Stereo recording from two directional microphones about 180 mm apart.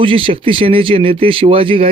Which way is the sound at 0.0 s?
30° right (ahead or behind).